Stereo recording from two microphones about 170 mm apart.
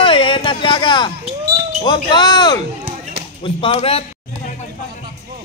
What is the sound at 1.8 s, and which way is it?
A man's voice, 25° left (ahead or behind).